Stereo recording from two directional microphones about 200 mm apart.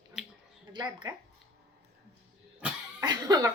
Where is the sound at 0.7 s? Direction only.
20° right (ahead or behind).